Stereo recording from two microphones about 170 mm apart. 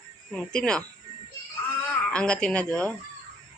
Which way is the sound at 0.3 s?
5° left (ahead or behind).